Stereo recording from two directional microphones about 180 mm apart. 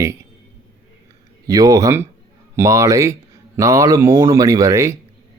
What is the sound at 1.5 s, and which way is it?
A man's voice, 20° right (ahead or behind).